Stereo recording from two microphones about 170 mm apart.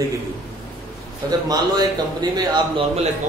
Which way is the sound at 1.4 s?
25° right (ahead or behind).